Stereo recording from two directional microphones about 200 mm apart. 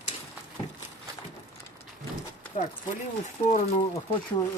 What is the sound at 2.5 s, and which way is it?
Speech, 40° left (ahead or behind).